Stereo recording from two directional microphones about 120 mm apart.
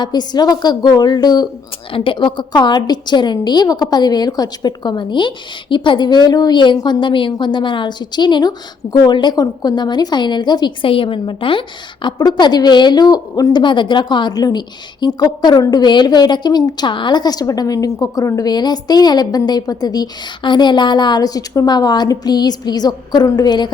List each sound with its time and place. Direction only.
0.0 s a woman's voice: 35° left (ahead or behind)